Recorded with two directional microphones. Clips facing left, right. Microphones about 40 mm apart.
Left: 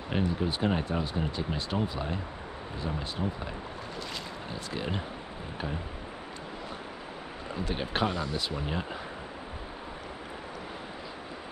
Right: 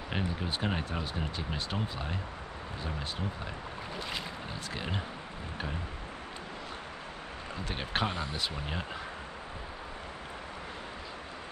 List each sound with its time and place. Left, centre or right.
0.1 s speech: centre
4.7 s speech: centre
7.7 s speech: centre
8.1 s speech: right
8.4 s speech: centre